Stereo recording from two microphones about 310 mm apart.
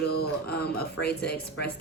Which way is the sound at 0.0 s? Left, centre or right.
Left.